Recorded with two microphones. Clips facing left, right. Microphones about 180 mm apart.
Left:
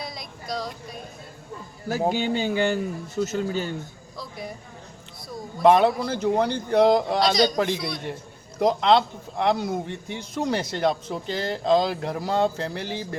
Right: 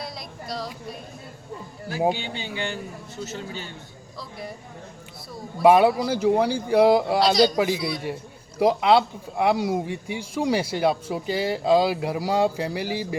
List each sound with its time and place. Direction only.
0.0 s a sound: centre (ahead or behind)
2.1 s speech: 45° left (ahead or behind)
4.2 s speech: centre (ahead or behind)
5.5 s a man's voice: 10° right (ahead or behind)